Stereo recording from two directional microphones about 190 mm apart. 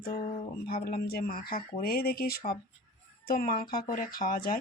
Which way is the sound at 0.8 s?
50° left (ahead or behind).